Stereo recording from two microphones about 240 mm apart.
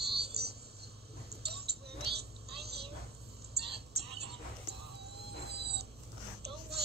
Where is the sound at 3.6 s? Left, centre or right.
Right.